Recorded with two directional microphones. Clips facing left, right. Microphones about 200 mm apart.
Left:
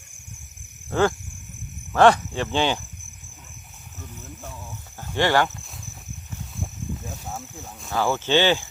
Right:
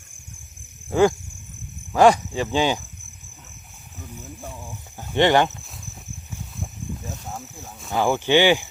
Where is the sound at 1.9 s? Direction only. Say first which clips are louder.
Right 1 dB; 10° right (ahead or behind).